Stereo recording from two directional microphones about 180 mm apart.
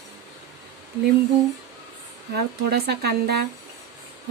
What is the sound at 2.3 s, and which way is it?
Speech, 65° right (ahead or behind).